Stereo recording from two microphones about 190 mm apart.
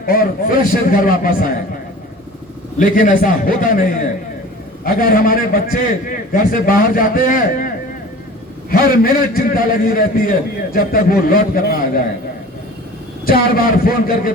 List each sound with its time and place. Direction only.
0.0 s a man's voice: 50° left (ahead or behind)
2.7 s a man's voice: 45° left (ahead or behind)
8.7 s a man's voice: 50° left (ahead or behind)
13.6 s a man's voice: 50° left (ahead or behind)